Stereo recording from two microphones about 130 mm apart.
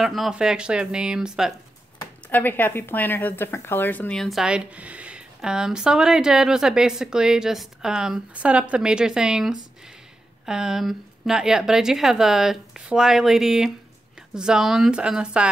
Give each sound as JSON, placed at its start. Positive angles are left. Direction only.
{"t": 0.0, "sound": "speech", "side_deg": 0}
{"t": 2.2, "sound": "speech", "side_deg": 15}
{"t": 4.2, "sound": "speech", "side_deg": 0}